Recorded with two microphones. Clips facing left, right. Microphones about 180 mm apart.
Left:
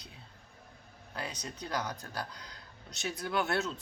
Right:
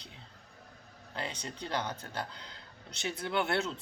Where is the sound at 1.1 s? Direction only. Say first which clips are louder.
Right 1 dB; 30° right (ahead or behind).